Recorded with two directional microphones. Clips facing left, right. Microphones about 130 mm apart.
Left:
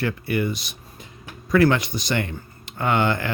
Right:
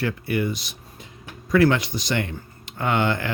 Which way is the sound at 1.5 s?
50° left (ahead or behind).